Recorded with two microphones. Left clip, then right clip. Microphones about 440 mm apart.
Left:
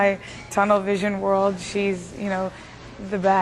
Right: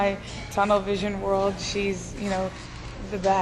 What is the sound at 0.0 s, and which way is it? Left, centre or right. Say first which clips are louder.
A woman's voice: left 5 dB; left.